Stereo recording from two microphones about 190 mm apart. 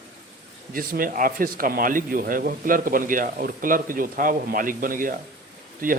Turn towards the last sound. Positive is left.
turn(degrees=-50)  # may be behind; listen again after turning